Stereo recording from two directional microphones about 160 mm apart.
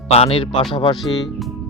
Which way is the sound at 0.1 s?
35° left (ahead or behind).